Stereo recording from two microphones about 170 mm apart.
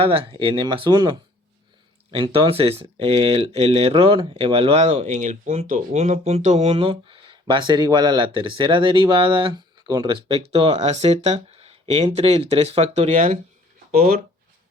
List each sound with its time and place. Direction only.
0.0 s speech: 35° right (ahead or behind)